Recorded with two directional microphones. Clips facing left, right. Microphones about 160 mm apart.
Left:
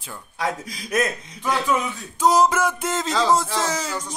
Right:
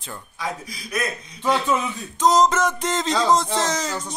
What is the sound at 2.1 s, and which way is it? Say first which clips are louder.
Music: even; 10° left (ahead or behind).